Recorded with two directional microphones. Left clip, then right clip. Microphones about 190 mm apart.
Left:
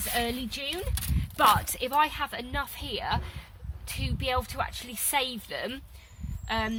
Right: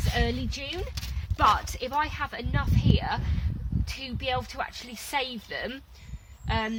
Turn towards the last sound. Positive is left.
turn(degrees=5)  # may be behind; listen again after turning